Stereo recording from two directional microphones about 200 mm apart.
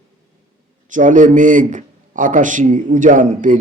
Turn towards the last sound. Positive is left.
turn(degrees=-40)  # may be behind; listen again after turning